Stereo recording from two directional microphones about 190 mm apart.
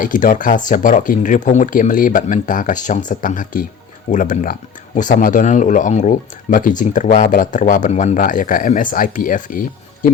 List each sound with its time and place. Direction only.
0.0 s speech: 45° left (ahead or behind)